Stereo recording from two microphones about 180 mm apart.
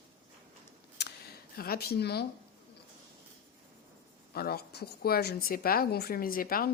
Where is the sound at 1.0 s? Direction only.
70° left (ahead or behind).